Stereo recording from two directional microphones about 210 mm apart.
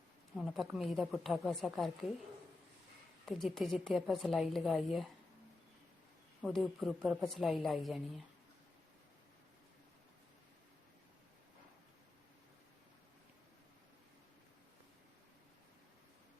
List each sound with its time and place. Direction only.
0.3 s a woman's voice: centre (ahead or behind)
3.2 s a woman's voice: centre (ahead or behind)
6.4 s a woman's voice: centre (ahead or behind)